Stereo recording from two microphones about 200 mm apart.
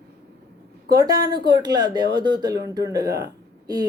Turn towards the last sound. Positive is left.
turn(degrees=-20)  # may be behind; listen again after turning